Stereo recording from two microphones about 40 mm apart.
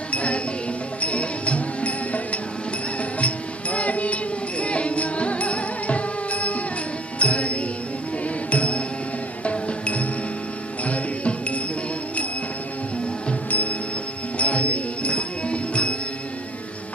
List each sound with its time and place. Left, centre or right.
0.1 s music: left
13.5 s music: left